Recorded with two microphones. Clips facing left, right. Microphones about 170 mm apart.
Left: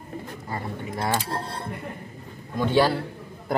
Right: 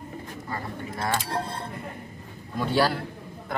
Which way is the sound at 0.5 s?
30° left (ahead or behind).